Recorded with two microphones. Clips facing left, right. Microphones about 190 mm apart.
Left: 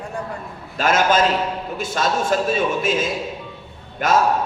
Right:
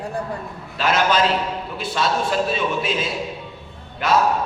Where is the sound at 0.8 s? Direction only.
45° left (ahead or behind).